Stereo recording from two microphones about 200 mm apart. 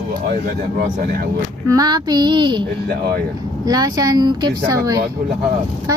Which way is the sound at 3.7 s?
20° right (ahead or behind).